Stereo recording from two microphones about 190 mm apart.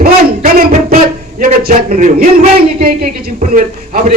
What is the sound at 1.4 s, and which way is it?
A man's voice, 45° right (ahead or behind).